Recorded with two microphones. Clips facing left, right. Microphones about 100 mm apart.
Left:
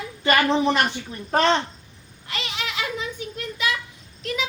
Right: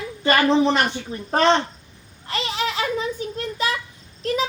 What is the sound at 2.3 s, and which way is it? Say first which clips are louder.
Female singing: right 6 dB; 35° right (ahead or behind).